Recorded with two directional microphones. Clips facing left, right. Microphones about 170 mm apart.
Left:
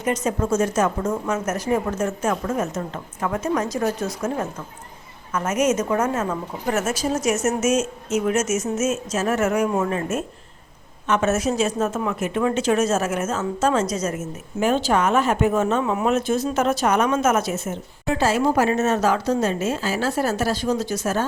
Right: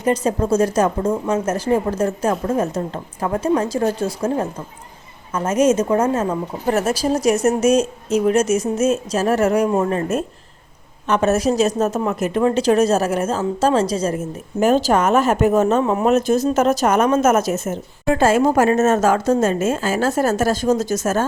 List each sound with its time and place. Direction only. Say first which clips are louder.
0.0 s a woman's voice: right 4 dB; 30° right (ahead or behind)